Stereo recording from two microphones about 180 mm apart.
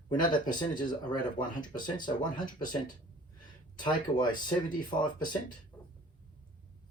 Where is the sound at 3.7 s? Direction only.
25° left (ahead or behind).